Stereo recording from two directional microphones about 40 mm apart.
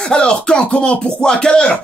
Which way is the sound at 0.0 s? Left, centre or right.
Left.